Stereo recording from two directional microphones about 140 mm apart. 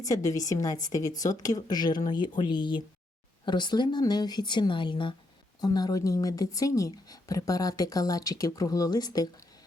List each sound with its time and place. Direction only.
0.0 s speech: 25° left (ahead or behind)